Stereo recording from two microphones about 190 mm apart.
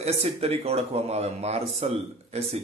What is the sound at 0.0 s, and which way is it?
A man's voice, 30° right (ahead or behind).